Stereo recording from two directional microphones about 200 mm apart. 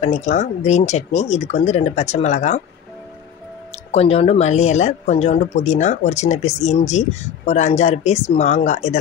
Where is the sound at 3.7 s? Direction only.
30° left (ahead or behind).